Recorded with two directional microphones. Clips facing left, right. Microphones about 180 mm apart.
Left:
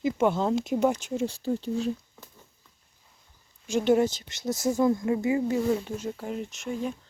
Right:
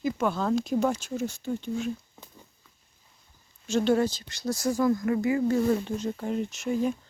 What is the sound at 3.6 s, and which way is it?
Speech, 15° left (ahead or behind).